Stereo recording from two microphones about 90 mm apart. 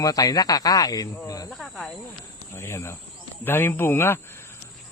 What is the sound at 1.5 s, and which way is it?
Speech, centre (ahead or behind).